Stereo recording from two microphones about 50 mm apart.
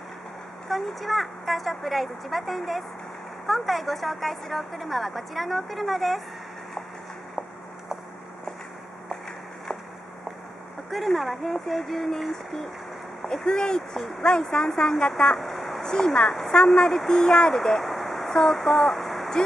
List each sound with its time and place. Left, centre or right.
0.7 s a woman's voice: centre
10.9 s a woman's voice: centre
15.3 s vehicle: centre
15.8 s speech: centre
17.8 s a sound: centre